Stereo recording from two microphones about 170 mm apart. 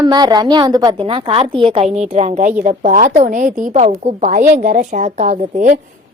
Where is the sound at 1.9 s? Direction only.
40° right (ahead or behind).